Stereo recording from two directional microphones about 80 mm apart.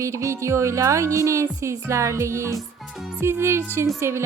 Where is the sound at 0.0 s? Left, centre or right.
Right.